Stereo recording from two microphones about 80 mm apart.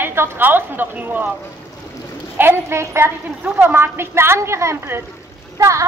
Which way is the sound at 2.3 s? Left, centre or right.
Right.